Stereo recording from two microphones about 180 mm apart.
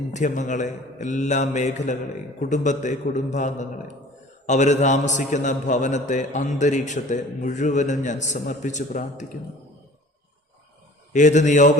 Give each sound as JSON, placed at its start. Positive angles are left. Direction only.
{"t": 0.1, "sound": "a man's voice", "side_deg": 45}
{"t": 11.1, "sound": "a man's voice", "side_deg": 40}